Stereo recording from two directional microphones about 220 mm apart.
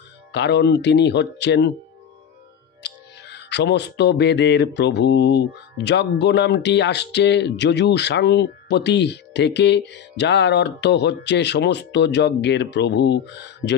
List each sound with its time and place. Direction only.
0.3 s music: 50° left (ahead or behind)
2.8 s music: 50° left (ahead or behind)